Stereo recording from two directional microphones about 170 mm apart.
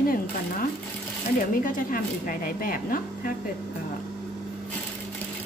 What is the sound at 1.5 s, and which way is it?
Speech, 55° left (ahead or behind).